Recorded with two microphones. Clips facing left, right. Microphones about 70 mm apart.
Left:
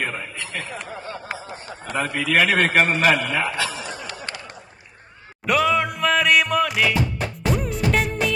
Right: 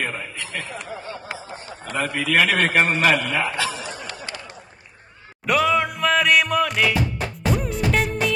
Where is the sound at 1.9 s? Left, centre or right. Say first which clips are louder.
Even; left.